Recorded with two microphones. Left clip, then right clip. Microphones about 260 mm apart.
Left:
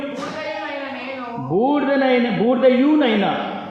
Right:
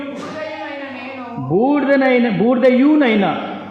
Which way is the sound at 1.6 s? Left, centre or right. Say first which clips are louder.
Right 3 dB; right.